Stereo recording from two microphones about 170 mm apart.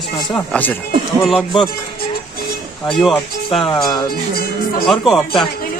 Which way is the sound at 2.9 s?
Centre (ahead or behind).